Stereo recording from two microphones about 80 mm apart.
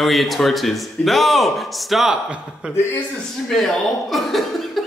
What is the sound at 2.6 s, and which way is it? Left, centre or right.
Speech, centre.